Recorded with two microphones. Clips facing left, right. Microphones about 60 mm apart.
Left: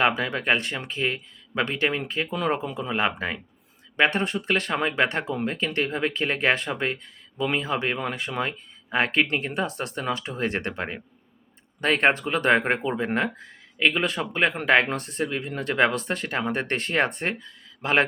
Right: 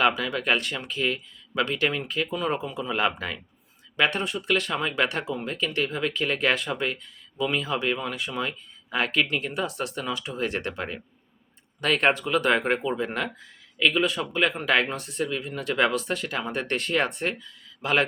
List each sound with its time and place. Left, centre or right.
0.0 s speech: left